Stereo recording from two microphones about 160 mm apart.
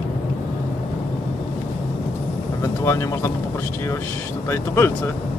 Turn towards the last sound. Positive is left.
turn(degrees=15)  # may be behind; listen again after turning